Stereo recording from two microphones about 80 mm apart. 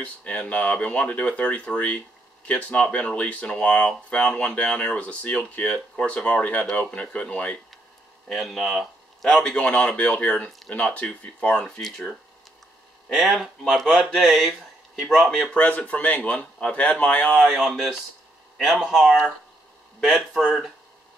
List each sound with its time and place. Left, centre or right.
0.0 s speech: centre
8.3 s speech: centre
13.1 s speech: centre
15.5 s speech: centre
17.3 s speech: centre